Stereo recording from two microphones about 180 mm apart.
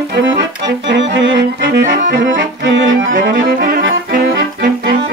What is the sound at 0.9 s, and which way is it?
Music, 85° right.